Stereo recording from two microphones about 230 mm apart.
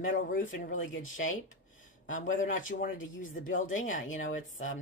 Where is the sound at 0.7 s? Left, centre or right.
Left.